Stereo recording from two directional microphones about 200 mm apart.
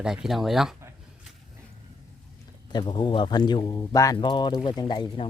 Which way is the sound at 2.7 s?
25° left (ahead or behind).